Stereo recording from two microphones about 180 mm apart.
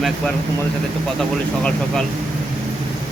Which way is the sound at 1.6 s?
5° left (ahead or behind).